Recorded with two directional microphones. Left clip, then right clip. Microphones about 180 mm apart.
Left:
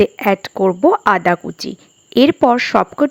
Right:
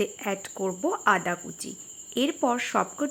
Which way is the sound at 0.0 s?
40° left (ahead or behind).